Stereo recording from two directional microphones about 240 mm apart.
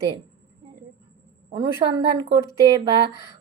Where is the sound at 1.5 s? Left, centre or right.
Centre.